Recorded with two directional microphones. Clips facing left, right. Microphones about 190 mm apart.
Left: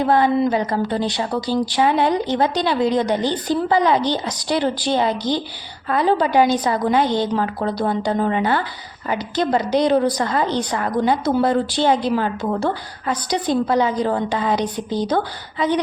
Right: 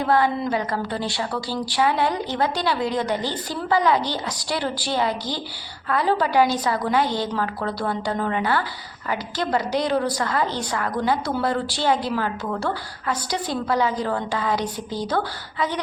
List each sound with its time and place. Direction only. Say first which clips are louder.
0.0 s a woman's voice: left 4 dB; 20° left (ahead or behind)